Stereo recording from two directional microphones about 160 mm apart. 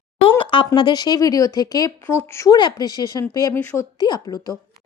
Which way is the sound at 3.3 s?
20° left (ahead or behind).